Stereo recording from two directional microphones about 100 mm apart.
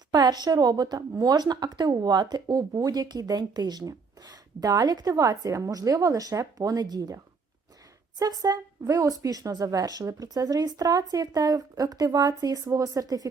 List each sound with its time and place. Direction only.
0.1 s speech: 45° right (ahead or behind)
8.2 s speech: 40° right (ahead or behind)